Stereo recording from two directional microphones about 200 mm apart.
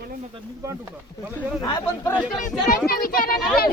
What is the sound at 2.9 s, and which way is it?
Speech, 45° left (ahead or behind).